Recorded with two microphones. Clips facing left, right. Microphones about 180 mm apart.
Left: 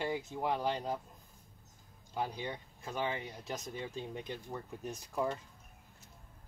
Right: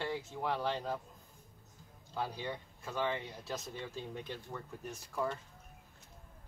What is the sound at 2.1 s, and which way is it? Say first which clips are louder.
Speech: left 1 dB; 15° left (ahead or behind).